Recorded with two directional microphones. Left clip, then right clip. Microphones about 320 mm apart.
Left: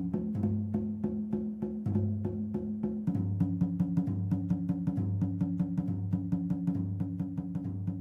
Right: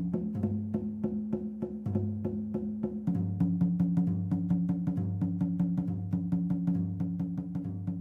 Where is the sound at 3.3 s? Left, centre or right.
Centre.